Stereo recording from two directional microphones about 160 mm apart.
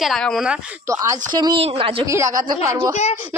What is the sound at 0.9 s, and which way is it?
A woman's voice, 20° right (ahead or behind).